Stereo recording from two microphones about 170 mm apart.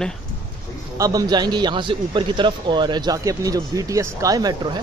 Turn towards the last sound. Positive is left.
turn(degrees=-25)  # may be behind; listen again after turning